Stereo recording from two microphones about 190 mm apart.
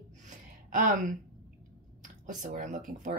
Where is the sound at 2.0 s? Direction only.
45° right (ahead or behind).